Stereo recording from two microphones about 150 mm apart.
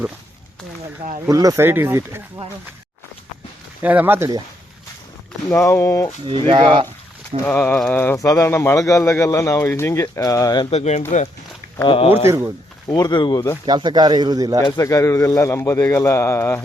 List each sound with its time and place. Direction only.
1.3 s speech: 25° right (ahead or behind)
3.8 s speech: 10° right (ahead or behind)
5.5 s speech: 15° left (ahead or behind)
6.2 s speech: 35° right (ahead or behind)
7.4 s speech: 10° left (ahead or behind)
10.7 s speech: 45° left (ahead or behind)
12.2 s speech: 15° right (ahead or behind)
12.9 s speech: 30° left (ahead or behind)
13.7 s speech: 30° right (ahead or behind)
14.6 s speech: 20° left (ahead or behind)